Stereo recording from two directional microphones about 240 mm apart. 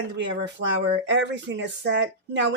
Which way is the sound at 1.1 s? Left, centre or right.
Right.